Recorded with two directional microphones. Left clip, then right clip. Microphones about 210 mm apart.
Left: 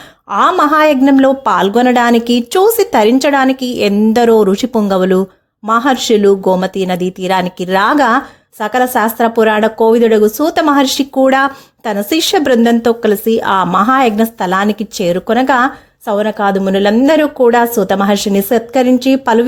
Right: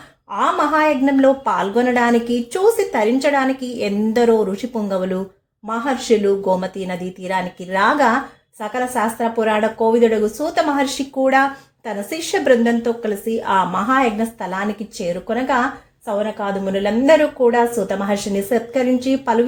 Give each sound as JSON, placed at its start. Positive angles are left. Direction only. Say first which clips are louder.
{"t": 0.3, "sound": "a woman's voice", "louder": "left 7 dB", "side_deg": 50}